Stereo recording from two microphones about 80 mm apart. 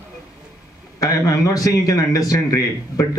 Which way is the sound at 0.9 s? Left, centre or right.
Left.